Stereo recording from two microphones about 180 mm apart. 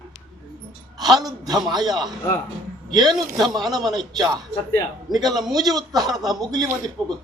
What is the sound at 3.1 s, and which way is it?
Speech, 20° right (ahead or behind).